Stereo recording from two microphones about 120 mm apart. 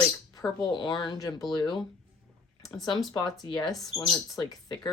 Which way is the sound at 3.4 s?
35° left (ahead or behind).